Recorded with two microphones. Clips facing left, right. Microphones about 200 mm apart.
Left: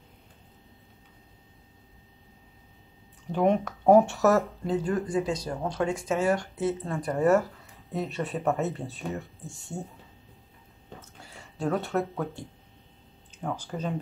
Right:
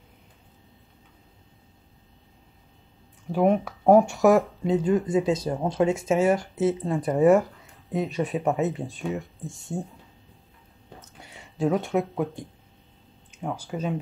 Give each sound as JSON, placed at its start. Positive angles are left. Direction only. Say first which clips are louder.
{"t": 3.3, "sound": "speech", "louder": "right 2 dB", "side_deg": -5}
{"t": 4.2, "sound": "speech", "louder": "right 4 dB", "side_deg": -15}
{"t": 7.1, "sound": "speech", "louder": "right 4 dB", "side_deg": 0}
{"t": 11.2, "sound": "a sound", "louder": "right 5 dB", "side_deg": 0}
{"t": 12.0, "sound": "speech", "louder": "right 3 dB", "side_deg": -15}